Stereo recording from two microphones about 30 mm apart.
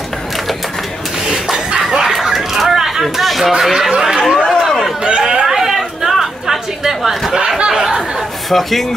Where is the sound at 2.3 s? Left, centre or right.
Centre.